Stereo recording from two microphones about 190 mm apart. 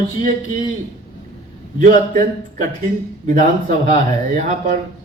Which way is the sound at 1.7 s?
45° right (ahead or behind).